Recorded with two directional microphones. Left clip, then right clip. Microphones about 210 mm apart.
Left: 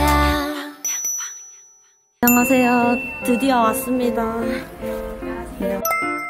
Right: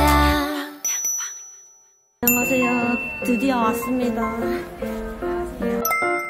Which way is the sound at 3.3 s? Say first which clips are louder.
Left 4 dB; 15° left (ahead or behind).